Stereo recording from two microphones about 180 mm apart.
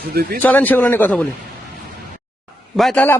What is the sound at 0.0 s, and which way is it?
Speech, 60° right (ahead or behind).